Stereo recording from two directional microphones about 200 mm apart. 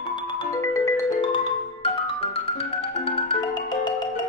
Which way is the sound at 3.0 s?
30° left (ahead or behind).